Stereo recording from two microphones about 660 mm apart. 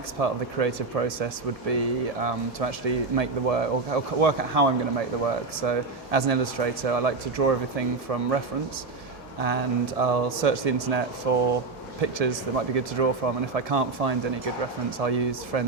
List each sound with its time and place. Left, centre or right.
0.2 s speech: right
9.4 s speech: right